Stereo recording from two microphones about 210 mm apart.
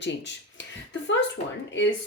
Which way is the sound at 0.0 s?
55° left (ahead or behind).